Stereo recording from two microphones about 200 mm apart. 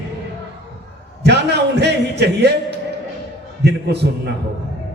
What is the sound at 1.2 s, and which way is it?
A man's voice, 55° right (ahead or behind).